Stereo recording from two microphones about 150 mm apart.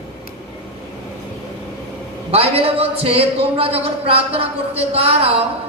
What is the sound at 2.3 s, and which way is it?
A man's voice, 40° right (ahead or behind).